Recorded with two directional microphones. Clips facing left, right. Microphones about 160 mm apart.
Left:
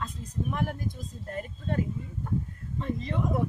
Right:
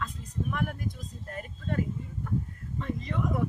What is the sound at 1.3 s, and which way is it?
A woman's voice, 30° left (ahead or behind).